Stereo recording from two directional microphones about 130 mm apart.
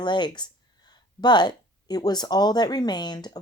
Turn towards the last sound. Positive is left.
turn(degrees=35)  # may be behind; listen again after turning